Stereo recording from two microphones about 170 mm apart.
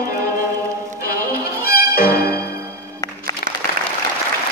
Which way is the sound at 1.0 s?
60° left (ahead or behind).